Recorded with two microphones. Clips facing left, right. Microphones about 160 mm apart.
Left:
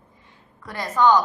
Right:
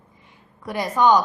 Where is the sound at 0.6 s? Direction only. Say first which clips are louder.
Right 1 dB; 10° right (ahead or behind).